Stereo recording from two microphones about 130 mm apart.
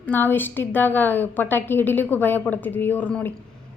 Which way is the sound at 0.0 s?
15° left (ahead or behind).